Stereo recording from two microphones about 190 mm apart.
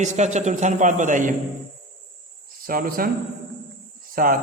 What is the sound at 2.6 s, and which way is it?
Speech, 50° right (ahead or behind).